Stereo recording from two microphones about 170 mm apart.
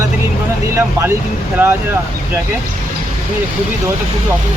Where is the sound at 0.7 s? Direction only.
15° right (ahead or behind).